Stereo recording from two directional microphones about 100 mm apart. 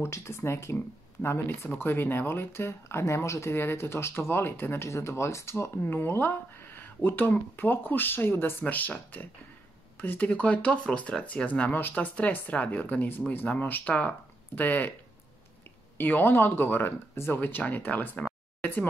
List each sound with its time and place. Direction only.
0.0 s speech: 25° left (ahead or behind)
16.0 s speech: 20° left (ahead or behind)
18.6 s a sound: 15° left (ahead or behind)